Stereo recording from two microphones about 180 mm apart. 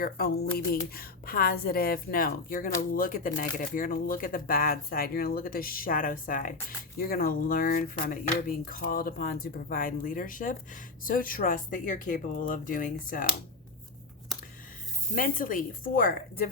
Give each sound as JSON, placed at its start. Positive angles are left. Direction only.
{"t": 0.0, "sound": "a woman's voice", "side_deg": 55}
{"t": 15.1, "sound": "speech", "side_deg": 50}